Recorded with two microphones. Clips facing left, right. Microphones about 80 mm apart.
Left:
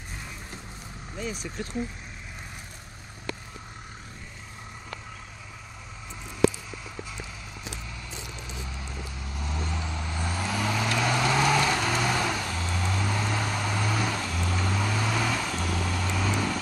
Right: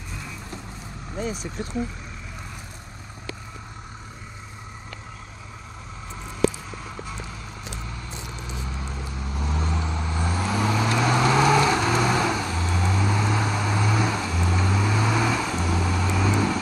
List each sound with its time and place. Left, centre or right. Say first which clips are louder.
8.5 s vehicle: right 5 dB; right